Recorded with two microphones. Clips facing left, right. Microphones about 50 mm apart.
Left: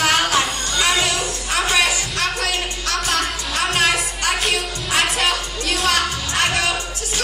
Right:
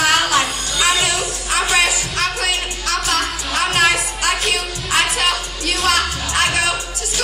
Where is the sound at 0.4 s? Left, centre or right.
Centre.